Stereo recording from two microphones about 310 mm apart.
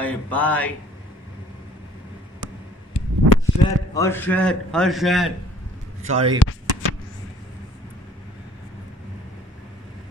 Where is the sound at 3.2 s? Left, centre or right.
Right.